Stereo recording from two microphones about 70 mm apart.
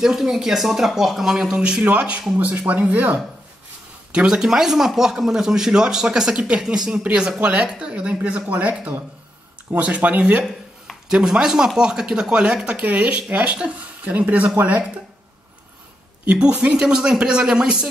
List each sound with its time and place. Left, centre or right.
0.0 s speech: centre; by 3.2 s right
4.1 s speech: centre
11.1 s speech: centre
16.3 s speech: centre